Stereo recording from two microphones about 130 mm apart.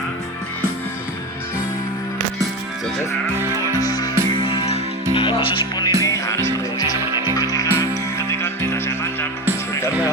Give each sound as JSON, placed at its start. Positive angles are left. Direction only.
{"t": 3.8, "sound": "music", "side_deg": 30}
{"t": 4.4, "sound": "music", "side_deg": 45}
{"t": 6.0, "sound": "music", "side_deg": 25}